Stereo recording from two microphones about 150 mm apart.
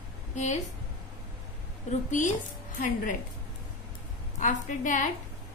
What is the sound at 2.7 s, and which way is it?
Speech, 65° left (ahead or behind).